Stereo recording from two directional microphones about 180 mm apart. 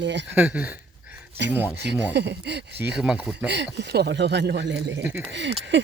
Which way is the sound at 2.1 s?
70° right (ahead or behind).